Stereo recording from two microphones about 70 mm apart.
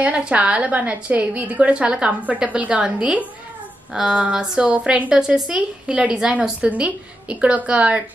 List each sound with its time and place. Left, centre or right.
0.0 s a woman's voice: centre